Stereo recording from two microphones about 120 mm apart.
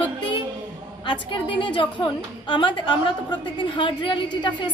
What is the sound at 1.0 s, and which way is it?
A woman's voice, 40° left (ahead or behind).